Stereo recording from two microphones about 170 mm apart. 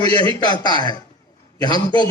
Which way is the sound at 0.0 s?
25° left (ahead or behind).